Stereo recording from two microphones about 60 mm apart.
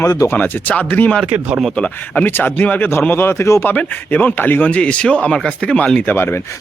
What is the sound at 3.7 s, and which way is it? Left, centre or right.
Speech, left.